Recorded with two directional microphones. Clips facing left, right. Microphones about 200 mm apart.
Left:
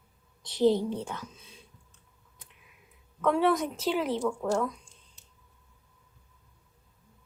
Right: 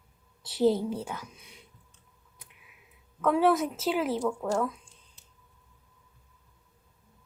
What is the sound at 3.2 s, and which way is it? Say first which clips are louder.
A woman's voice: right 1 dB; centre (ahead or behind).